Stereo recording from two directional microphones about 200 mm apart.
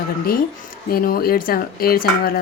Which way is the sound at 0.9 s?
50° left (ahead or behind).